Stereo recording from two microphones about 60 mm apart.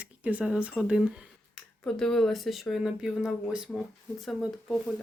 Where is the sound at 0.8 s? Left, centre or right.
Centre.